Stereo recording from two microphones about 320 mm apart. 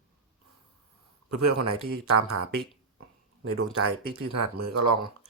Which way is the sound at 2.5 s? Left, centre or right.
Right.